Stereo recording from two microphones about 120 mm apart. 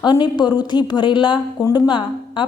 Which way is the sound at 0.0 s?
40° left (ahead or behind).